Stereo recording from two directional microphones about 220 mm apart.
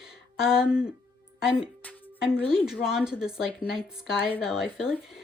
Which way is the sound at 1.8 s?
10° left (ahead or behind).